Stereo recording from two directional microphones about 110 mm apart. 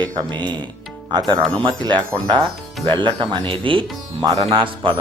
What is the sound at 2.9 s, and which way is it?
Speech, 45° right (ahead or behind).